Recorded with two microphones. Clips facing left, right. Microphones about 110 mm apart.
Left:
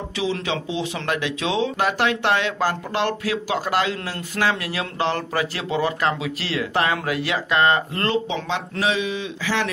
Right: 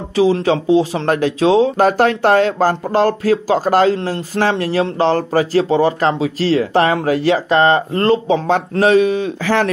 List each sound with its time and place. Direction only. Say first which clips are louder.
0.1 s speech: right 12 dB; 40° right (ahead or behind)